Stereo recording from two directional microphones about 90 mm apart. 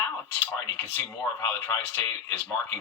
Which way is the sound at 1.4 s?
25° left (ahead or behind).